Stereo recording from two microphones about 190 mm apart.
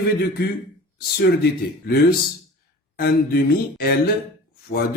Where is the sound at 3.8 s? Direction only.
50° left (ahead or behind).